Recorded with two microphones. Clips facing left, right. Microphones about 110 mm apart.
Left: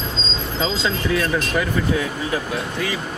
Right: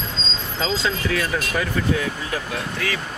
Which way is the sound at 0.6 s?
20° left (ahead or behind).